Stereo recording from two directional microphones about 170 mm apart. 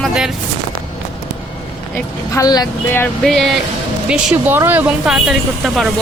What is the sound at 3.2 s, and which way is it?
Speech, centre (ahead or behind).